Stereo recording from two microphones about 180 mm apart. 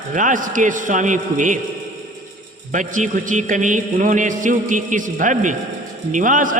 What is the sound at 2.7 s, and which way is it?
A man's voice, 45° right (ahead or behind).